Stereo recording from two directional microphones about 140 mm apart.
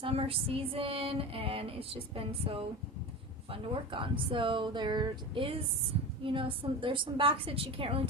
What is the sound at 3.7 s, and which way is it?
Female singing, 35° right (ahead or behind).